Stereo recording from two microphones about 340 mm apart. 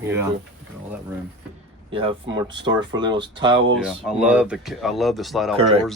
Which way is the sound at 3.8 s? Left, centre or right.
Centre.